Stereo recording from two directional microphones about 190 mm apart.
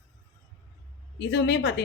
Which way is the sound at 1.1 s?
65° left (ahead or behind).